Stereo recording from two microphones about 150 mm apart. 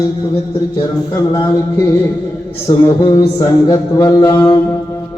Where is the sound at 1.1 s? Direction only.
25° left (ahead or behind).